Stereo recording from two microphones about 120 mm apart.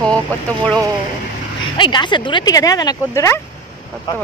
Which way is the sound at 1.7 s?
40° left (ahead or behind).